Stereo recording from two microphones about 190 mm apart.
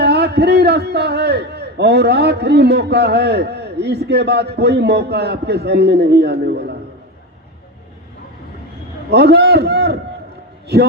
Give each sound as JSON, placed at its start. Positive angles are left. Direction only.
{"t": 0.0, "sound": "a man's voice", "side_deg": -60}
{"t": 9.0, "sound": "a man's voice", "side_deg": -60}